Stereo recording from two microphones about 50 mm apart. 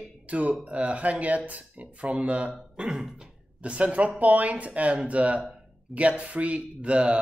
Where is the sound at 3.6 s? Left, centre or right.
Right.